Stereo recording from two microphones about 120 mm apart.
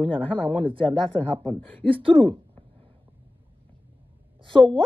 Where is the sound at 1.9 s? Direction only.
50° right (ahead or behind).